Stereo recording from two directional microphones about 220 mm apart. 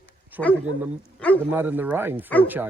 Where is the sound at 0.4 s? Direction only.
5° right (ahead or behind).